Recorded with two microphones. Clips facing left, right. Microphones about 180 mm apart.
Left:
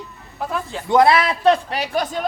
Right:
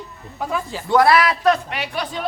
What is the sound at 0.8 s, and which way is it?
A man's voice, 20° left (ahead or behind).